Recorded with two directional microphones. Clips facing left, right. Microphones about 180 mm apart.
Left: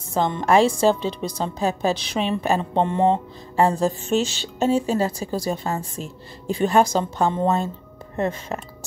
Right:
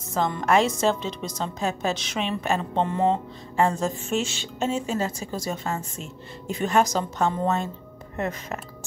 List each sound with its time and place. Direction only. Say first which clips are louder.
0.1 s a woman's voice: left 3 dB; 30° left (ahead or behind)